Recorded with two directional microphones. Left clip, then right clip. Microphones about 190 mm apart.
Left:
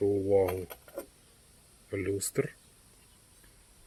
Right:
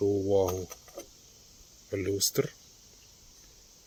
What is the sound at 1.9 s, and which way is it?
Speech, 15° right (ahead or behind).